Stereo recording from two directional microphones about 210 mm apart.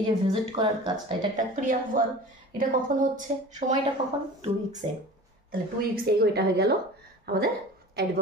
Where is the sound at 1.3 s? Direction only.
40° right (ahead or behind).